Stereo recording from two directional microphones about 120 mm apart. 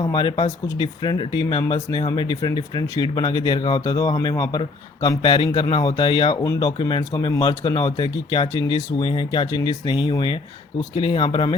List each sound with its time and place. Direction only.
0.0 s speech: 40° left (ahead or behind)
6.3 s speech: 25° left (ahead or behind)
6.6 s speech: 40° left (ahead or behind)
9.5 s speech: 35° left (ahead or behind)